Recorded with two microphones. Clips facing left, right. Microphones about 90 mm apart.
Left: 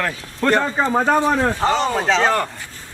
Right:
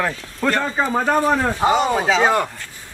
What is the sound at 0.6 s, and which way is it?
Speech, centre (ahead or behind).